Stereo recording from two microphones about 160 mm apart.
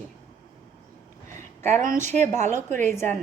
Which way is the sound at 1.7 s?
50° right (ahead or behind).